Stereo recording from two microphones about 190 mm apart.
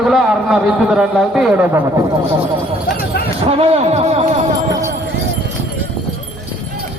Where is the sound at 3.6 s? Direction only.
35° right (ahead or behind).